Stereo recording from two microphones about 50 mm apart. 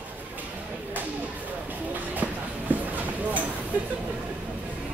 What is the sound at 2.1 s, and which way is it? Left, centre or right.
Train, right.